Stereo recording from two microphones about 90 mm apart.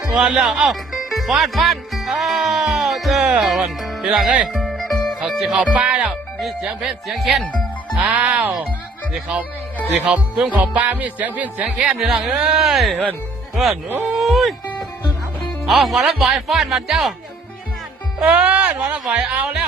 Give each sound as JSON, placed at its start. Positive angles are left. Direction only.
{"t": 0.1, "sound": "music", "side_deg": -5}
{"t": 4.6, "sound": "music", "side_deg": 0}
{"t": 5.7, "sound": "music", "side_deg": -15}
{"t": 6.4, "sound": "speech", "side_deg": -5}
{"t": 7.9, "sound": "music", "side_deg": -15}
{"t": 14.3, "sound": "speech", "side_deg": 0}
{"t": 15.6, "sound": "speech", "side_deg": 0}
{"t": 18.2, "sound": "music", "side_deg": -15}